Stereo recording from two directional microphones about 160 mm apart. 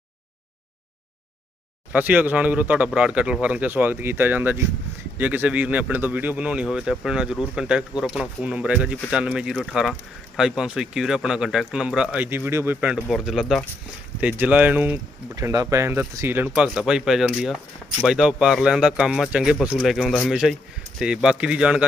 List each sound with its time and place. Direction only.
1.9 s speech: 10° right (ahead or behind)